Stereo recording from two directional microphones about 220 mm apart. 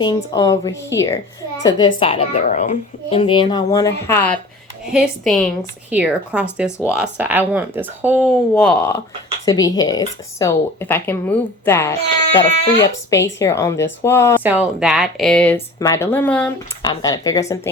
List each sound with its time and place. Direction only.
0.0 s speech: 20° left (ahead or behind)
4.9 s speech: centre (ahead or behind)
6.7 s speech: 10° left (ahead or behind)
6.9 s speech: 5° right (ahead or behind)
8.5 s speech: 5° left (ahead or behind)
9.5 s speech: 15° left (ahead or behind)
14.4 s speech: 5° right (ahead or behind)
16.8 s speech: 15° left (ahead or behind)